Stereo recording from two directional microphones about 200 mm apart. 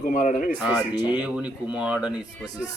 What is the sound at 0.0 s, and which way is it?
Speech, 40° left (ahead or behind).